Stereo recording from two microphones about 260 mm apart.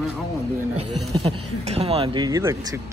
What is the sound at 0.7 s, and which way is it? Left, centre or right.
Speech, right.